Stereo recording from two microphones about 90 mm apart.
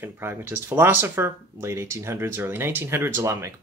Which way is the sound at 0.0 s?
25° right (ahead or behind).